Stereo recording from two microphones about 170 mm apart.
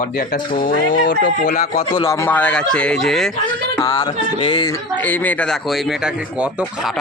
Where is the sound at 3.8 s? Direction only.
25° left (ahead or behind).